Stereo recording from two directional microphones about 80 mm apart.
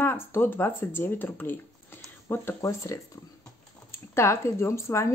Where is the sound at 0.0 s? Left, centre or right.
Left.